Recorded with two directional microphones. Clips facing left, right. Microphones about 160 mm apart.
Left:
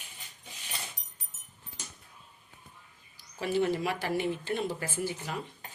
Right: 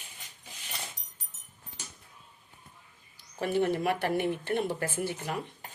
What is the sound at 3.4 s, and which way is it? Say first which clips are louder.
Speech: right 1 dB; 55° right (ahead or behind).